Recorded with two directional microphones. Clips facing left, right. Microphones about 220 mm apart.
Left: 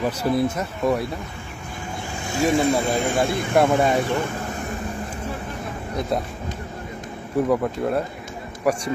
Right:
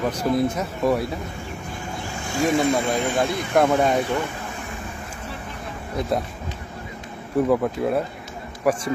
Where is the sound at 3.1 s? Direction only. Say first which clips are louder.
Left 1 dB; 50° left (ahead or behind).